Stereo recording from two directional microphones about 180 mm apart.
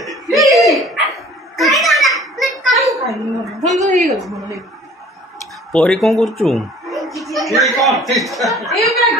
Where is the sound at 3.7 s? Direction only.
40° right (ahead or behind).